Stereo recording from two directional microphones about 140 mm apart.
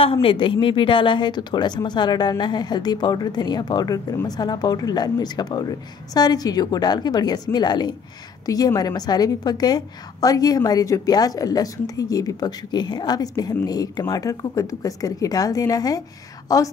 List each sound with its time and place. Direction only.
0.0 s a woman's voice: 40° left (ahead or behind); by 16.7 s 25° left (ahead or behind)